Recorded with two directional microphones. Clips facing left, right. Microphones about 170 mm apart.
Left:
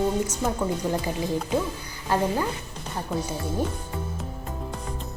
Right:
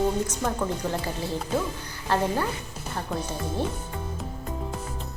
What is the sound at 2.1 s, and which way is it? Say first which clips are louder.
A woman's voice: left 1 dB; 10° left (ahead or behind).